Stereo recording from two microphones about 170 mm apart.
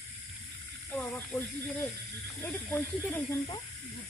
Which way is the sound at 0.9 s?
Centre (ahead or behind).